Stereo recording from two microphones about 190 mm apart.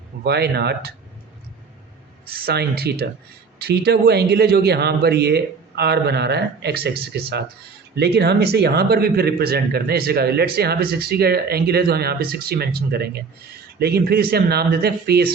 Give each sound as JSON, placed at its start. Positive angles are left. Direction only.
{"t": 0.3, "sound": "a man's voice", "side_deg": -60}
{"t": 2.2, "sound": "a man's voice", "side_deg": -55}